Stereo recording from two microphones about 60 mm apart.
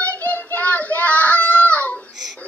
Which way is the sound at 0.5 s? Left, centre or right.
Left.